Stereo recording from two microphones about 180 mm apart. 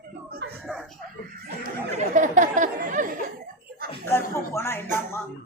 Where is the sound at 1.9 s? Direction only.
45° right (ahead or behind).